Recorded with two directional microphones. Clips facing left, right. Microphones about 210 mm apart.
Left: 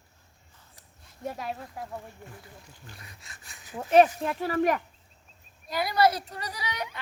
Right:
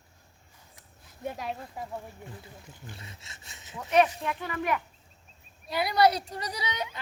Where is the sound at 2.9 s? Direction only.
25° right (ahead or behind).